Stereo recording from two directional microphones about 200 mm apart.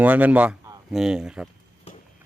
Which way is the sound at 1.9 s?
30° left (ahead or behind).